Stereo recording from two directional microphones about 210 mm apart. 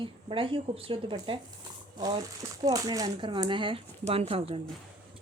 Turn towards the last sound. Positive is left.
turn(degrees=-25)  # may be behind; listen again after turning